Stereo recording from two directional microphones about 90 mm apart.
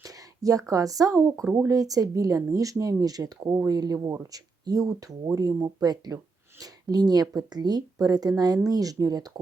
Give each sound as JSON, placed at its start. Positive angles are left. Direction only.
{"t": 0.0, "sound": "speech", "side_deg": -40}